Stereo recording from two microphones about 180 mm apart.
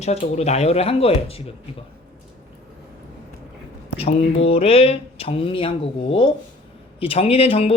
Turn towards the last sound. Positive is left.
turn(degrees=35)  # may be behind; listen again after turning